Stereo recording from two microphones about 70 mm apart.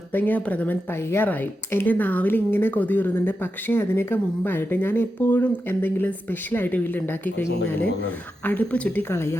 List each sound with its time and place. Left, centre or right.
0.1 s speech: left
9.0 s speech: left